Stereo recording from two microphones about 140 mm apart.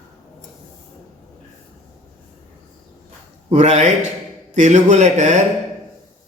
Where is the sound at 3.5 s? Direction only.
55° right (ahead or behind).